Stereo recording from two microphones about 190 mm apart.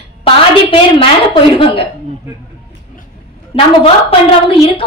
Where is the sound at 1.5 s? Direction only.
30° left (ahead or behind).